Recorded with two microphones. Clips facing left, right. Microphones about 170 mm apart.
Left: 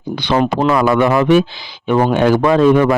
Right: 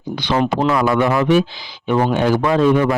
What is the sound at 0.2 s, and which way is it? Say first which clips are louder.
A man's voice: left 2 dB; 60° left (ahead or behind).